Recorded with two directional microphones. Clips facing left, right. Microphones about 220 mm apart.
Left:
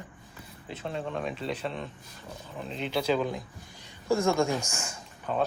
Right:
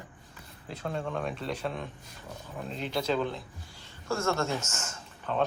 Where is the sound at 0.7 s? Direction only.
Centre (ahead or behind).